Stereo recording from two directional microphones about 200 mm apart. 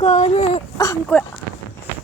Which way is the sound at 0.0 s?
35° left (ahead or behind).